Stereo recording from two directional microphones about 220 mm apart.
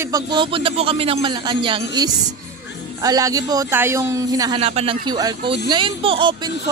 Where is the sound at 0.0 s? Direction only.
20° right (ahead or behind).